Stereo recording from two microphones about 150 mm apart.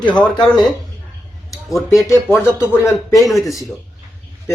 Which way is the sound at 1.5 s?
20° left (ahead or behind).